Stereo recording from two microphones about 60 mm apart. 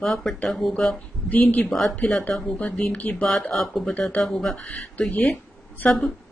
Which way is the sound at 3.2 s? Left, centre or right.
Centre.